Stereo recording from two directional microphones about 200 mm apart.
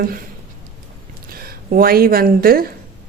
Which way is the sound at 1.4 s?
45° right (ahead or behind).